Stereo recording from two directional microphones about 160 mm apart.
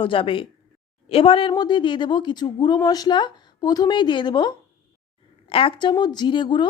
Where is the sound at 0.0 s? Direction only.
35° left (ahead or behind).